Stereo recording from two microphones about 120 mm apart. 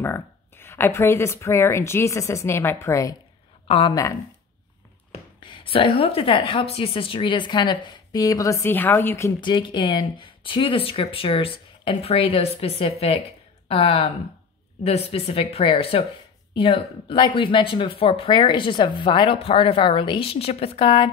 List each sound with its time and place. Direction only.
0.0 s speech: 20° left (ahead or behind)
3.6 s speech: 50° left (ahead or behind)
5.4 s a woman's voice: 45° left (ahead or behind); by 9.3 s 20° left (ahead or behind)
9.4 s speech: 40° left (ahead or behind)